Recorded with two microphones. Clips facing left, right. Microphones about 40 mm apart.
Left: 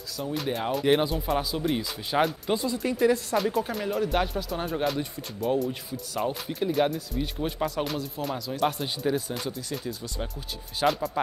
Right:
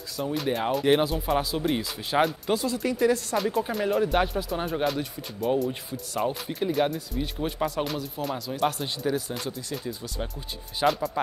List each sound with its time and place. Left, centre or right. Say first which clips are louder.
0.2 s speech: right 2 dB; centre
2.5 s speech: right 1 dB; centre